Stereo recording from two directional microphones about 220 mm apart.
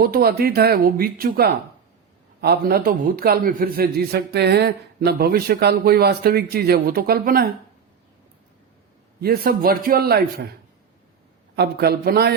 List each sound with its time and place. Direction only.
0.0 s a man's voice: 45° right (ahead or behind)
9.2 s a man's voice: 45° right (ahead or behind)
11.5 s a man's voice: 50° right (ahead or behind)